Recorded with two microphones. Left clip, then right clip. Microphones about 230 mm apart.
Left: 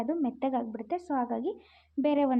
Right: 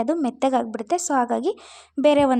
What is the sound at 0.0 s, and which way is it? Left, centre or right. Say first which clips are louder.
A woman's voice: right 9 dB; right.